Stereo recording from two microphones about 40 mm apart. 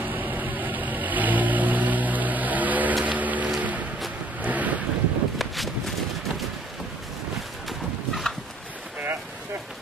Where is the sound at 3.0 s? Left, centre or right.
Right.